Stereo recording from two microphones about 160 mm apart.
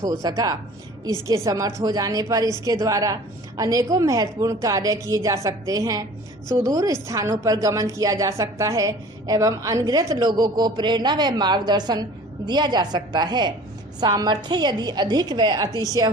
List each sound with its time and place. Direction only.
0.0 s a woman's voice: 25° right (ahead or behind)